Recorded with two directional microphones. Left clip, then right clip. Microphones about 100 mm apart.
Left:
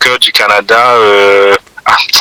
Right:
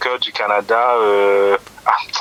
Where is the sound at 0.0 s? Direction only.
30° left (ahead or behind).